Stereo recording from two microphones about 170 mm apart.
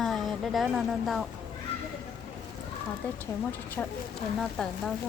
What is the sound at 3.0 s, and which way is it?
Speech, 10° left (ahead or behind).